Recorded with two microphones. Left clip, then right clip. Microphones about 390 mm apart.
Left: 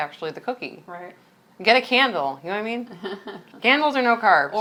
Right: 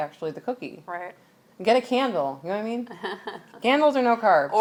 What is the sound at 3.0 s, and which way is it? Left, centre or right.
Speech, right.